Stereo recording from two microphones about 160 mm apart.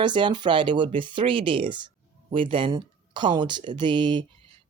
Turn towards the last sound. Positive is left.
turn(degrees=-30)  # may be behind; listen again after turning